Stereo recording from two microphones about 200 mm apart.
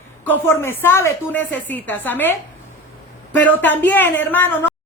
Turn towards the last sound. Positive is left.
turn(degrees=10)  # may be behind; listen again after turning